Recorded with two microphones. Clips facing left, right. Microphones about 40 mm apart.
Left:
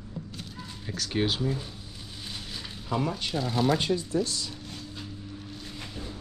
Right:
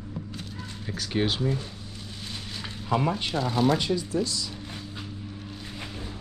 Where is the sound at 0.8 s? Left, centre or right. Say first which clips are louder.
Right 1 dB; centre.